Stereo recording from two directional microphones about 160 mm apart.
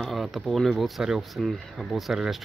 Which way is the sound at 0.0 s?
Centre (ahead or behind).